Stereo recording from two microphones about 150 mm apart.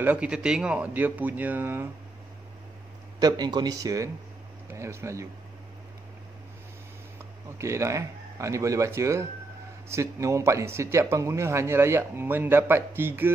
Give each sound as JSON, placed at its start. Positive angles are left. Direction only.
{"t": 0.0, "sound": "speech", "side_deg": -10}
{"t": 3.2, "sound": "speech", "side_deg": -25}
{"t": 7.5, "sound": "speech", "side_deg": -20}